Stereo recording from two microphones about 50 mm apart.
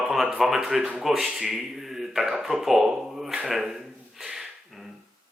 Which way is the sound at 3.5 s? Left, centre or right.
Centre.